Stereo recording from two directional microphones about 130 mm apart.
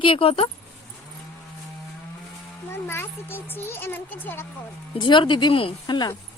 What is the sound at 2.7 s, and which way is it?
Speech, 20° left (ahead or behind).